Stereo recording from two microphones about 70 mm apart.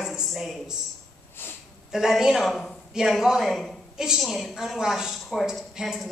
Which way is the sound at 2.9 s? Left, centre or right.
Centre.